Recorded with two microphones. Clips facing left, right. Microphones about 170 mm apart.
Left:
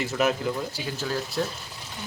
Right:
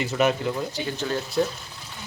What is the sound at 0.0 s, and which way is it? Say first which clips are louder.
Speech: right 2 dB; centre (ahead or behind).